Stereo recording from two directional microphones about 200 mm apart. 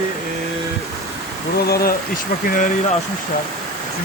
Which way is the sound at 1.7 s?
45° left (ahead or behind).